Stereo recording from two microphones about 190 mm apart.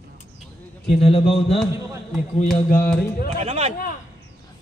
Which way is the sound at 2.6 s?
50° left (ahead or behind).